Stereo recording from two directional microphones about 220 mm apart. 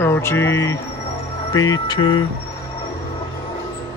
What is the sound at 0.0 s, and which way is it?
Speech, 10° left (ahead or behind).